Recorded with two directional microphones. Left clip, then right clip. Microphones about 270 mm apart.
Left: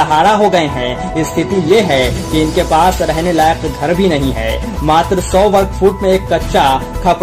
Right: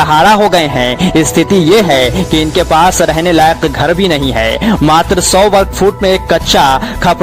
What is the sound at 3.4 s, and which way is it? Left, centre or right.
Music, right.